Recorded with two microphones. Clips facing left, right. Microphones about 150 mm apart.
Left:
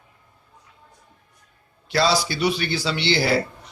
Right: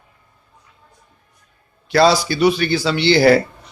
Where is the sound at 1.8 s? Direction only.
50° right (ahead or behind).